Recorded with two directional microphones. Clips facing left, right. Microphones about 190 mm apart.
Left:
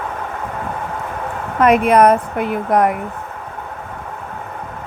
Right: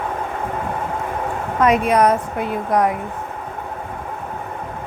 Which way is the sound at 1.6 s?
60° left (ahead or behind).